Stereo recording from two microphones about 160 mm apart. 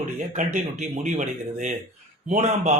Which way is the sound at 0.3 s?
50° right (ahead or behind).